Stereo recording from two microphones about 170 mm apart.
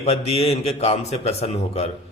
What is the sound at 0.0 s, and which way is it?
Speech, 35° left (ahead or behind).